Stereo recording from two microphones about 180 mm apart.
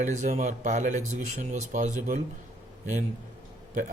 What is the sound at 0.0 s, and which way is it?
Speech, 40° right (ahead or behind).